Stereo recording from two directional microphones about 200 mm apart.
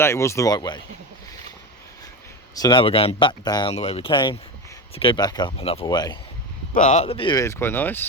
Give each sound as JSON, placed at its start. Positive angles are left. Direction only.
{"t": 0.0, "sound": "speech", "side_deg": 15}
{"t": 2.6, "sound": "speech", "side_deg": 25}
{"t": 6.7, "sound": "speech", "side_deg": 35}